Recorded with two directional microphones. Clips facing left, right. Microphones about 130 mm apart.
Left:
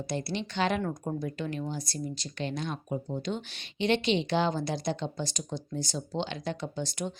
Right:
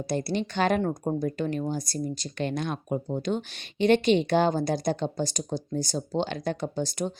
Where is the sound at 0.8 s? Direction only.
35° right (ahead or behind).